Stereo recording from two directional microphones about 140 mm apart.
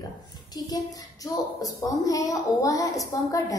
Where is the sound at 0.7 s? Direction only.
25° left (ahead or behind).